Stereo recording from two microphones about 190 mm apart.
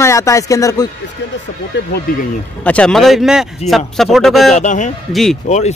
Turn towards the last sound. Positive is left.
turn(degrees=0)  # may be behind; listen again after turning